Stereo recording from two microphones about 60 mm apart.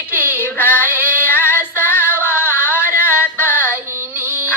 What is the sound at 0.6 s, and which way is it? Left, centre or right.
Female singing, left.